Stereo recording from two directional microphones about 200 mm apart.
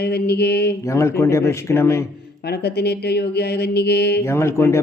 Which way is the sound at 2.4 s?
55° left (ahead or behind).